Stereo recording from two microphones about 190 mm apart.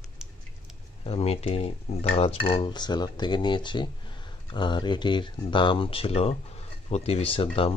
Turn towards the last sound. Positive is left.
turn(degrees=30)  # may be behind; listen again after turning